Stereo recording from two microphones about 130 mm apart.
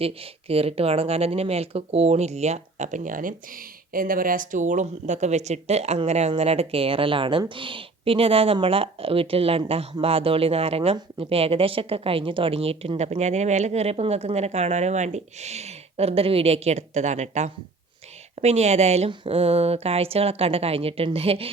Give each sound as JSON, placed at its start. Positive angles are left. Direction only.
{"t": 0.0, "sound": "a woman's voice", "side_deg": -50}